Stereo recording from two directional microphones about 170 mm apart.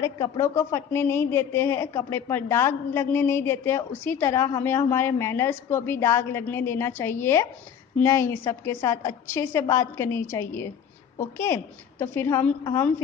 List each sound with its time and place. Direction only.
0.0 s speech: 20° left (ahead or behind)